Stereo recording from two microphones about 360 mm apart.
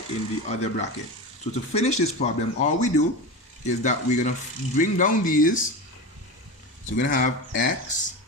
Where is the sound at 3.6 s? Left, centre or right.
Centre.